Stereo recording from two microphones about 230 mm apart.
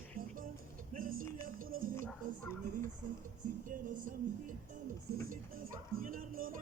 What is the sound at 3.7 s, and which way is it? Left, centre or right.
Speech, right.